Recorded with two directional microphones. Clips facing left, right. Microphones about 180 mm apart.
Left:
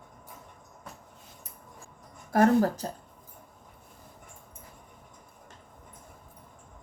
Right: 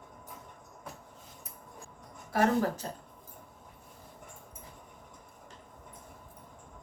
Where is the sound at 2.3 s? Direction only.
45° left (ahead or behind).